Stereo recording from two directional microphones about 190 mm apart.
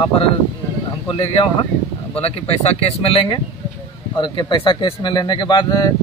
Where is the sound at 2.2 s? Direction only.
30° left (ahead or behind).